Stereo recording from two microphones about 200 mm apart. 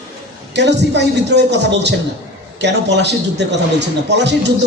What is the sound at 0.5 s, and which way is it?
A man's voice, 60° right (ahead or behind).